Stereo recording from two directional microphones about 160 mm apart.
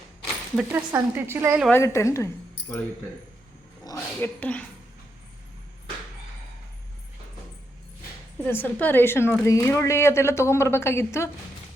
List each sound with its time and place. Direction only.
0.5 s speech: 10° right (ahead or behind)
1.7 s a woman's voice: 20° left (ahead or behind)
3.8 s a woman's voice: 15° left (ahead or behind)
8.4 s a woman's voice: 10° left (ahead or behind)